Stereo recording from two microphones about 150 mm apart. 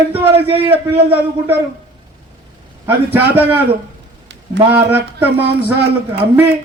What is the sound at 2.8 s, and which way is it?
Speech, 10° right (ahead or behind).